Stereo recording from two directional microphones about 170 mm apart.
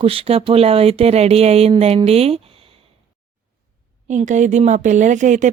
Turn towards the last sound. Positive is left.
turn(degrees=-45)  # may be behind; listen again after turning